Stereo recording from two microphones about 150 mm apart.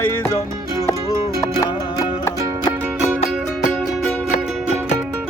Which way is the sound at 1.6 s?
25° left (ahead or behind).